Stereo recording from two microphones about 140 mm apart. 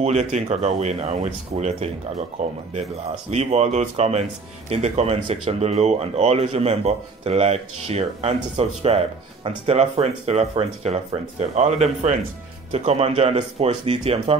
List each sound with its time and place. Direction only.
0.0 s speech: 55° right (ahead or behind)